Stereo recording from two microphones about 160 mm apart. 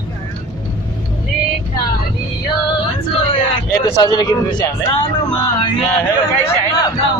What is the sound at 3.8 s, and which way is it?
A man's voice, 30° left (ahead or behind).